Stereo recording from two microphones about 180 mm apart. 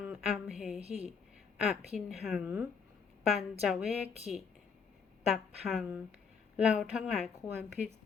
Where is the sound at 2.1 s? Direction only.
Centre (ahead or behind).